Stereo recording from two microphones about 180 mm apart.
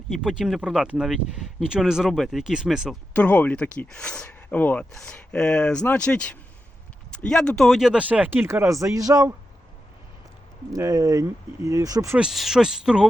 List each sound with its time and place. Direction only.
0.1 s speech: 5° right (ahead or behind)
3.1 s speech: 10° left (ahead or behind); by 9.3 s 20° right (ahead or behind)
10.7 s speech: 20° right (ahead or behind)
12.1 s speech: centre (ahead or behind)